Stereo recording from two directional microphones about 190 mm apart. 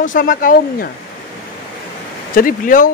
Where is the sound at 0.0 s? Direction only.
45° left (ahead or behind).